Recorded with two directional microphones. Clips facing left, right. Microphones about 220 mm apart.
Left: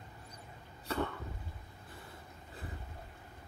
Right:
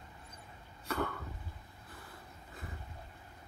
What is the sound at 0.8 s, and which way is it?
Cough, 30° left (ahead or behind).